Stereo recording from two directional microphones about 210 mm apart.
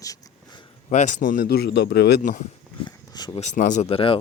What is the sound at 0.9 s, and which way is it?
Speech, 35° left (ahead or behind).